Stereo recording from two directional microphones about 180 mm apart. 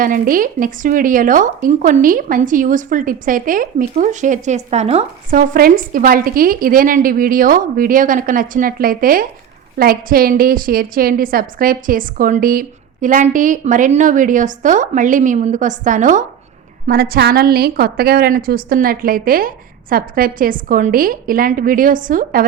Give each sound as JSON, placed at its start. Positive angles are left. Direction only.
{"t": 0.0, "sound": "a woman's voice", "side_deg": -50}
{"t": 5.4, "sound": "a woman's voice", "side_deg": -55}
{"t": 16.8, "sound": "a woman's voice", "side_deg": -55}